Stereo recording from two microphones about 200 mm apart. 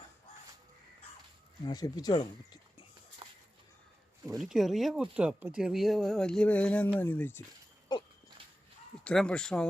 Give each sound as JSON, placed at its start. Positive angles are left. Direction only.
{"t": 1.6, "sound": "speech", "side_deg": 20}
{"t": 4.4, "sound": "speech", "side_deg": 0}
{"t": 9.0, "sound": "speech", "side_deg": 5}